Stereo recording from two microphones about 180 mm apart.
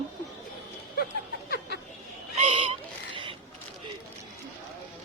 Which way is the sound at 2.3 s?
35° right (ahead or behind).